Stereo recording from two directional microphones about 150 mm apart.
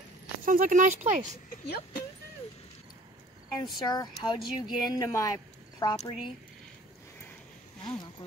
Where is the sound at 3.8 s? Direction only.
25° left (ahead or behind).